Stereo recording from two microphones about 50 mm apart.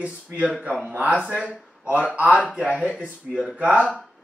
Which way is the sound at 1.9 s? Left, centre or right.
Right.